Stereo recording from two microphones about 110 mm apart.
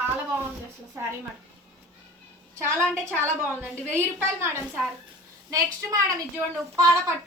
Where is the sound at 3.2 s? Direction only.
20° right (ahead or behind).